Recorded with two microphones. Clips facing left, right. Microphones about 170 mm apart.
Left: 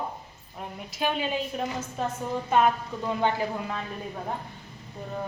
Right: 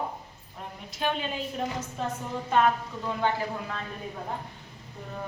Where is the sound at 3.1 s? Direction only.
20° left (ahead or behind).